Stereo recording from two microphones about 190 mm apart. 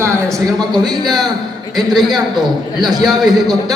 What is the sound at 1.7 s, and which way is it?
A man's voice, centre (ahead or behind).